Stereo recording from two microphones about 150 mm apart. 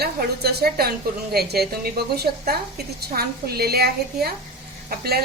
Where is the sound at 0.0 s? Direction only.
90° right.